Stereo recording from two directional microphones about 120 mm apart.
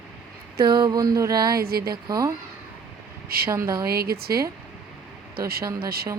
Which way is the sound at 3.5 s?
25° right (ahead or behind).